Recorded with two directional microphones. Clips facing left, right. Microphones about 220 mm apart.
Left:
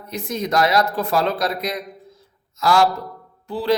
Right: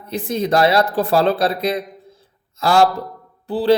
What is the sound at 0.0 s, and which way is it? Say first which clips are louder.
A man's voice: right 4 dB; 30° right (ahead or behind).